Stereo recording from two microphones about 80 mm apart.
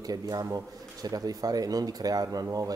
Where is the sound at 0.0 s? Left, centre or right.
Right.